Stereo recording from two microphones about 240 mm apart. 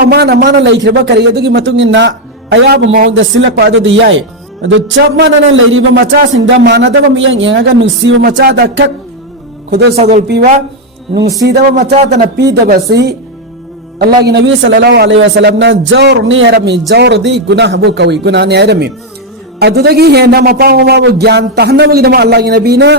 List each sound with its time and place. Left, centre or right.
0.0 s a man's voice: right
8.4 s a man's voice: right
10.0 s speech: right
11.7 s a man's voice: right